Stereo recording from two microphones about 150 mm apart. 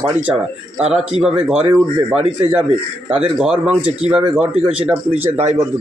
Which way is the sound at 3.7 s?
45° right (ahead or behind).